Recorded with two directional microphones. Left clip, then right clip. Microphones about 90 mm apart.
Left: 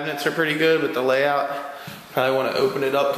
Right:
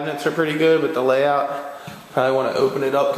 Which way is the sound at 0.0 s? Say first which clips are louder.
Right 1 dB; 15° right (ahead or behind).